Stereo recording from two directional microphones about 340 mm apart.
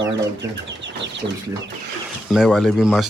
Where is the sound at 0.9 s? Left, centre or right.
Right.